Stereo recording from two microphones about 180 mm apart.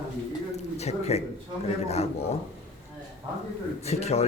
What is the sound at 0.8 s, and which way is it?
Speech, 35° left (ahead or behind).